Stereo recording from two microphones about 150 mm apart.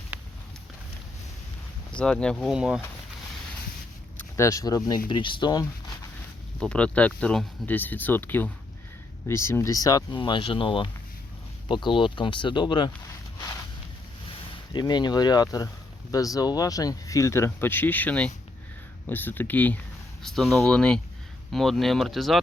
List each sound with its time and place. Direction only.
0.1 s a sound: 10° right (ahead or behind)
2.0 s speech: 5° left (ahead or behind)
4.4 s speech: 20° left (ahead or behind)
6.6 s speech: 5° left (ahead or behind); by 12.9 s 30° left (ahead or behind)
14.7 s speech: 30° left (ahead or behind); by 22.4 s centre (ahead or behind)